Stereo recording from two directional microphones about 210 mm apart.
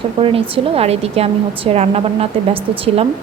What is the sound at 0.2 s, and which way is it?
A woman's voice, 25° right (ahead or behind).